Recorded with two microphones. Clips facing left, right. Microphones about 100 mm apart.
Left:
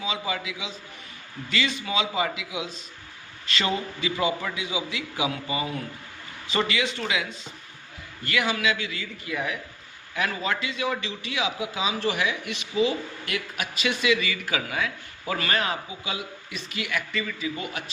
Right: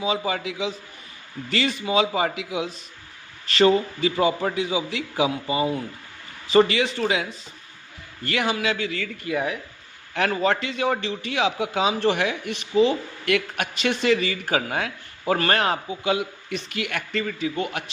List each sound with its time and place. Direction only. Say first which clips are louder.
0.0 s a man's voice: right 5 dB; 45° right (ahead or behind)
5.3 s speech: right 6 dB; 30° right (ahead or behind)
6.5 s a man's voice: right 8 dB; 40° right (ahead or behind)
10.2 s a man's voice: right 6 dB; 50° right (ahead or behind)